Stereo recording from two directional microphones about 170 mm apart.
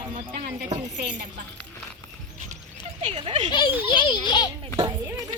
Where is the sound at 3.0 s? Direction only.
30° right (ahead or behind).